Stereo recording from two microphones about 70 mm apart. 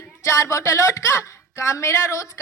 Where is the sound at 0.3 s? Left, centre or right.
Left.